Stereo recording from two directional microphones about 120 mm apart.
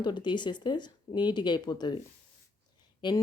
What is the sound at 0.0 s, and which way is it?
A woman's voice, 40° left (ahead or behind).